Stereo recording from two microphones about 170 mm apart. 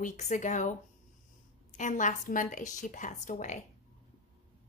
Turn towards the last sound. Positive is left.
turn(degrees=45)  # may be behind; listen again after turning